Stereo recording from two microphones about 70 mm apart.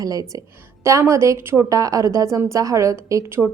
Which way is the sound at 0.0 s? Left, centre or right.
Right.